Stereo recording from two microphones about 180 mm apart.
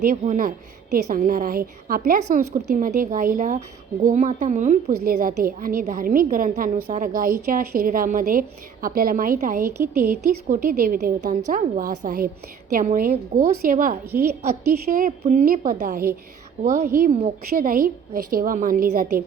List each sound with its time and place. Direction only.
0.0 s a woman's voice: 50° right (ahead or behind)
17.2 s a woman's voice: 35° right (ahead or behind)
17.7 s a woman's voice: 50° right (ahead or behind)